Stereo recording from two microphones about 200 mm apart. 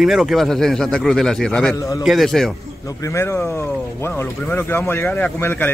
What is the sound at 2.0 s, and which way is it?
Speech, centre (ahead or behind).